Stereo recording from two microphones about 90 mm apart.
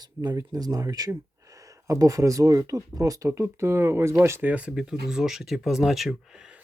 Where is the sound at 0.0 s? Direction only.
45° right (ahead or behind); by 6.6 s 5° right (ahead or behind).